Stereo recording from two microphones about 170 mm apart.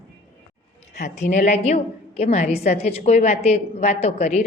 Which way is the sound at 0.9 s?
45° left (ahead or behind).